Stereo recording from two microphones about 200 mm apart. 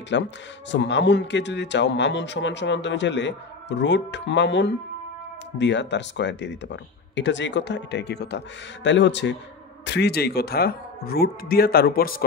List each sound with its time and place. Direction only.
0.1 s speech: 65° left (ahead or behind); by 12.3 s 45° left (ahead or behind)